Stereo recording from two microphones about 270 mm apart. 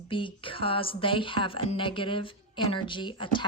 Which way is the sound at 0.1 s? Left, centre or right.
Centre.